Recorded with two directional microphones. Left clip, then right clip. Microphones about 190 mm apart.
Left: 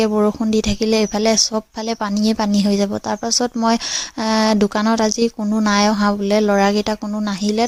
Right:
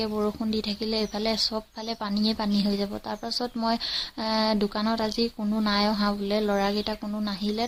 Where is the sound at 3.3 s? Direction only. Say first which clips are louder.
Left 10 dB; 40° left (ahead or behind).